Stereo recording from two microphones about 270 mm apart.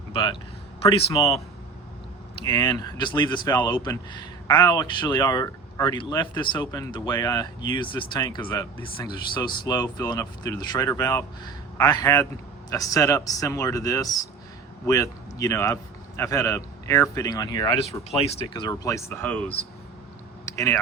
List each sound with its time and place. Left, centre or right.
0.1 s a man's voice: centre
2.5 s a man's voice: centre
20.4 s a sound: centre